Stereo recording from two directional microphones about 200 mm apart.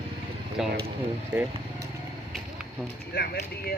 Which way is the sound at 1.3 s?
15° right (ahead or behind).